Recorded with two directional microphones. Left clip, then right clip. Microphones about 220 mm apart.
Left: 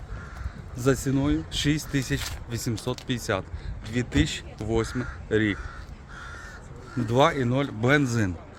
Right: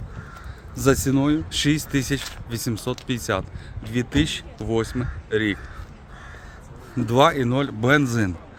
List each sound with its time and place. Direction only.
0.8 s speech: 30° right (ahead or behind)
7.1 s speech: 25° right (ahead or behind)